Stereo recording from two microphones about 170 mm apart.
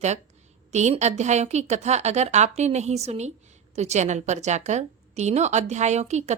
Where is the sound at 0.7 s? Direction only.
45° right (ahead or behind).